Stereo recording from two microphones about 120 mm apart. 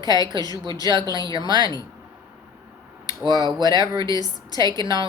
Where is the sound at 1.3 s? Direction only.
35° right (ahead or behind).